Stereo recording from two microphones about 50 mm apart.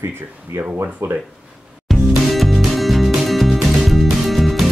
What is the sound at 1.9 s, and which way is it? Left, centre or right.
Music, centre.